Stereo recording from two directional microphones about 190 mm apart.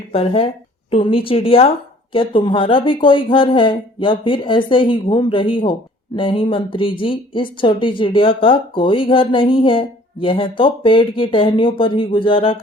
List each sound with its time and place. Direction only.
0.1 s a woman's voice: 30° left (ahead or behind)